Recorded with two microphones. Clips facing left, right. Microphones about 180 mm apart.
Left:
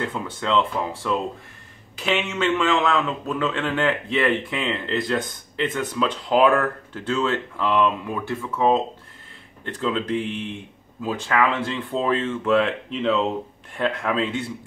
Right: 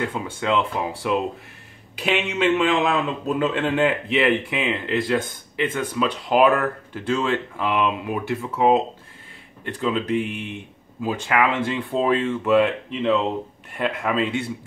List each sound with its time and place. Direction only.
0.0 s a man's voice: 10° right (ahead or behind)
9.8 s a man's voice: 5° right (ahead or behind)